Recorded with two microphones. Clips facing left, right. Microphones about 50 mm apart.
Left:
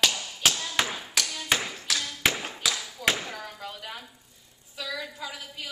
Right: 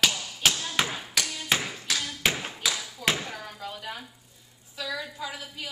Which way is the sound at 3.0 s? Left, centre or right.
Centre.